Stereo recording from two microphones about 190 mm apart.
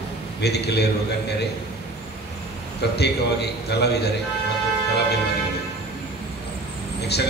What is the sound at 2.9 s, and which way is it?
A man's voice, 60° left (ahead or behind).